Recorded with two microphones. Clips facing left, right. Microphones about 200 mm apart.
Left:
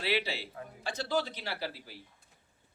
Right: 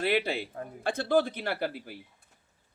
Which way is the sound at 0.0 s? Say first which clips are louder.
Right 5 dB; 50° right (ahead or behind).